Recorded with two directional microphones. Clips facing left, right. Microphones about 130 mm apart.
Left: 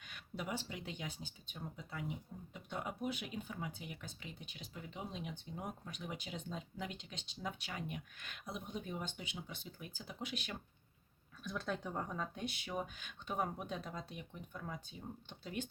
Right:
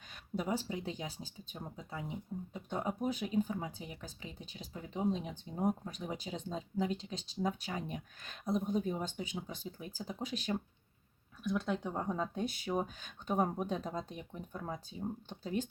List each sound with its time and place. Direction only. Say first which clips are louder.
0.1 s speech: right 7 dB; 35° right (ahead or behind)
11.4 s speech: right 6 dB; 20° right (ahead or behind); by 15.7 s 40° right (ahead or behind)